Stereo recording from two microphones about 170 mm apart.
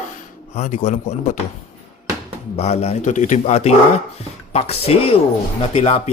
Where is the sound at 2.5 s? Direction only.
40° left (ahead or behind).